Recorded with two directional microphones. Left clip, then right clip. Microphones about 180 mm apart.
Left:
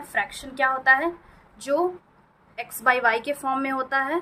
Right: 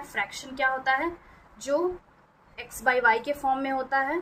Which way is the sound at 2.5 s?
20° left (ahead or behind).